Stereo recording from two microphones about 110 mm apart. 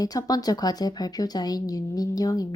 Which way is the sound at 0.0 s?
35° left (ahead or behind).